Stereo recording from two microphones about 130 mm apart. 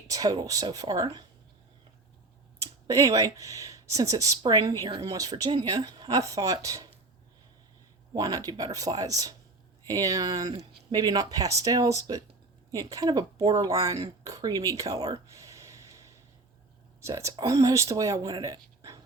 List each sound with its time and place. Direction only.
0.1 s speech: 30° right (ahead or behind)
2.8 s speech: 25° right (ahead or behind)
8.1 s speech: 30° right (ahead or behind)